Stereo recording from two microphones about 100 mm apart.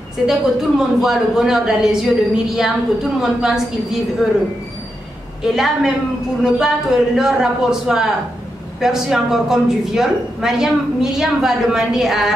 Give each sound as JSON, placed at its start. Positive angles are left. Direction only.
{"t": 0.3, "sound": "speech", "side_deg": -5}
{"t": 5.6, "sound": "speech", "side_deg": -5}